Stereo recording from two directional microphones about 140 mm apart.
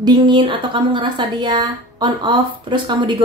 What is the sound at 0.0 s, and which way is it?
A woman's voice, 30° right (ahead or behind).